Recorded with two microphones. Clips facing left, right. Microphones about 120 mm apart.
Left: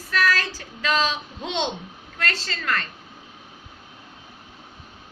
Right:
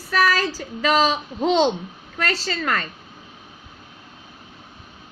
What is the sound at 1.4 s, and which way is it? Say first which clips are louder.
Speech: right 10 dB; 35° right (ahead or behind).